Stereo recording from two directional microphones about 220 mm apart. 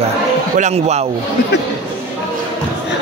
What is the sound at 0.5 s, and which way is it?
Speech, 30° right (ahead or behind).